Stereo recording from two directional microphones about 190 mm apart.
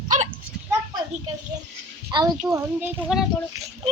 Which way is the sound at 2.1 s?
25° right (ahead or behind).